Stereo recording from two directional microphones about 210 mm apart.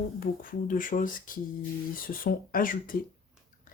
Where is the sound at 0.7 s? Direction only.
40° left (ahead or behind).